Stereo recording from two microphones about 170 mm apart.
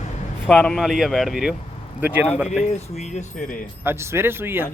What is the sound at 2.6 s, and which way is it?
Speech, 40° left (ahead or behind).